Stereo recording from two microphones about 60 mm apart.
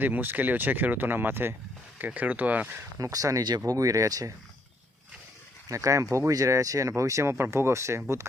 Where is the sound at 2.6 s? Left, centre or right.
Right.